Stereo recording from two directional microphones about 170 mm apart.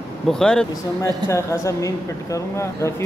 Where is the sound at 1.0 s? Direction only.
15° left (ahead or behind).